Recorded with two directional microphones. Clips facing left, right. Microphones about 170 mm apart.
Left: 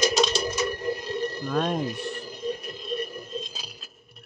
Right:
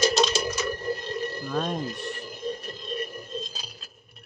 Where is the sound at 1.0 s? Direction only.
5° left (ahead or behind).